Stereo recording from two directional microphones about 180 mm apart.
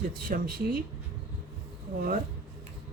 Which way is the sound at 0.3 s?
55° right (ahead or behind).